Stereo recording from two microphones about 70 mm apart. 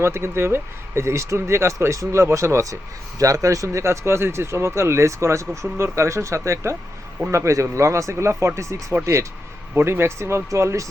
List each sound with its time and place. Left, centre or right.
0.0 s speech: right